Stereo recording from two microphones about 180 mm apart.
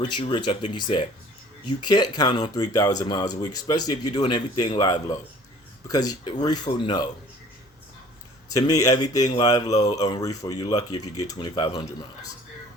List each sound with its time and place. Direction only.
0.1 s speech: 25° left (ahead or behind)
8.5 s speech: 20° left (ahead or behind)